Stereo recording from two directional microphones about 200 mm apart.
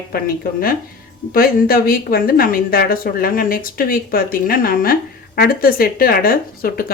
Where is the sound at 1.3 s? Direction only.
45° left (ahead or behind).